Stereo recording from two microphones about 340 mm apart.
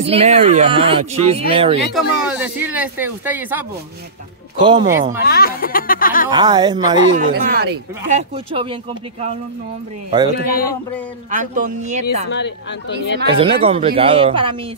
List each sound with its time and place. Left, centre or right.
0.0 s speech: centre
1.8 s speech: centre
5.2 s speech: left
6.3 s speech: centre
7.2 s speech: right
10.4 s speech: left
11.2 s speech: right
12.3 s speech: left
13.3 s speech: centre